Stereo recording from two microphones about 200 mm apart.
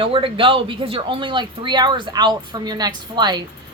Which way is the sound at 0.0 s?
25° right (ahead or behind).